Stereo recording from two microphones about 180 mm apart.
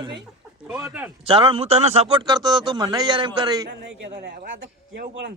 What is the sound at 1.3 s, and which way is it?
Speech, 30° right (ahead or behind).